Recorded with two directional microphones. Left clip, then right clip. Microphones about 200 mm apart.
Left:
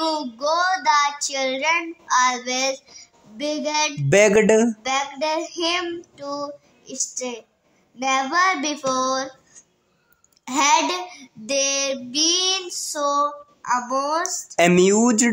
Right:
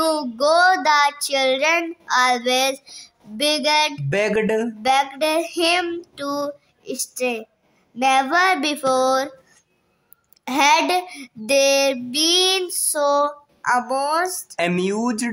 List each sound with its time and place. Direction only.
0.0 s child singing: 45° right (ahead or behind)
4.1 s speech: 25° left (ahead or behind)
4.8 s child singing: 45° right (ahead or behind)
10.4 s child singing: 40° right (ahead or behind)
14.5 s speech: 25° left (ahead or behind)